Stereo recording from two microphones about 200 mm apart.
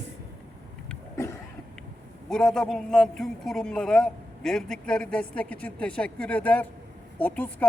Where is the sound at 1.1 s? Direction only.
15° left (ahead or behind).